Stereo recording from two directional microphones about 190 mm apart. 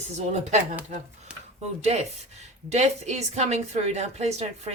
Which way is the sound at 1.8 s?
35° right (ahead or behind).